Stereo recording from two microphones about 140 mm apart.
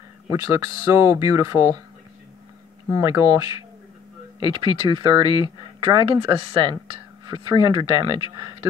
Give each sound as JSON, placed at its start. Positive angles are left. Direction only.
{"t": 0.3, "sound": "speech", "side_deg": -25}
{"t": 2.9, "sound": "speech", "side_deg": -25}